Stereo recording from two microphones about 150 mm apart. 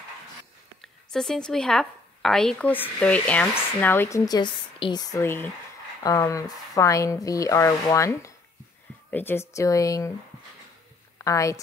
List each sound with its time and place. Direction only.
1.1 s a woman's voice: centre (ahead or behind)
4.3 s dishes: 30° left (ahead or behind)
11.2 s dishes: 20° left (ahead or behind)